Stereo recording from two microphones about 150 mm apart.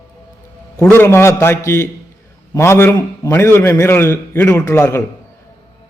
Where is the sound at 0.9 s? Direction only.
15° left (ahead or behind).